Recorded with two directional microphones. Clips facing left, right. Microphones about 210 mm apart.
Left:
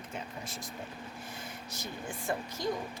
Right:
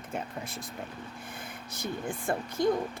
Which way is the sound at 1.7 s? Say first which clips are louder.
Right 7 dB; 55° right (ahead or behind).